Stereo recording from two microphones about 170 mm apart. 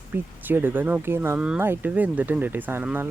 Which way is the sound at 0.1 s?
10° right (ahead or behind).